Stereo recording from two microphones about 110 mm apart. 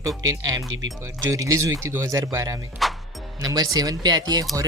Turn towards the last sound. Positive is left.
turn(degrees=-40)  # may be behind; listen again after turning